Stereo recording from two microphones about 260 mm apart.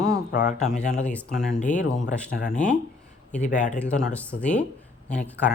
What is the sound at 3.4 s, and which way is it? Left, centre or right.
Speech, left.